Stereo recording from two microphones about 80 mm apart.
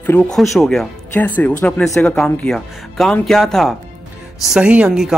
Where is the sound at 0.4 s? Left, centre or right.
Centre.